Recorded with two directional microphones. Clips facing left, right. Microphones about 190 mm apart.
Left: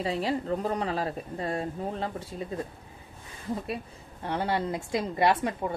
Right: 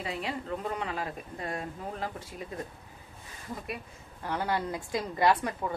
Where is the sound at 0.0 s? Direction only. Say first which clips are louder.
Left 6 dB; 35° left (ahead or behind).